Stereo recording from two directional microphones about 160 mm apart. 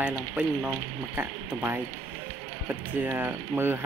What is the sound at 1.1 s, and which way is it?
Speech, 10° right (ahead or behind).